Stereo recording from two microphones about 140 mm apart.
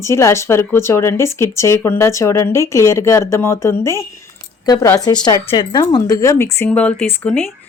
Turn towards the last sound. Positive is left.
turn(degrees=10)  # may be behind; listen again after turning